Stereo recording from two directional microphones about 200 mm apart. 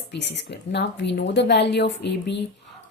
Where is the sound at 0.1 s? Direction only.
60° left (ahead or behind).